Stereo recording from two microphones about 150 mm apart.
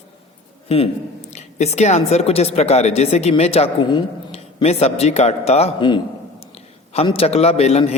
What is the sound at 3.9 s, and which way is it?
Speech, 30° left (ahead or behind).